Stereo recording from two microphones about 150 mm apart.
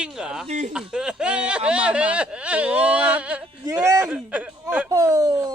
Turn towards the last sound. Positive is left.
turn(degrees=-25)  # may be behind; listen again after turning